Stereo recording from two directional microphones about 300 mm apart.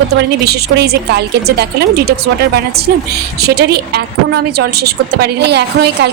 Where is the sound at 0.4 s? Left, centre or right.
Right.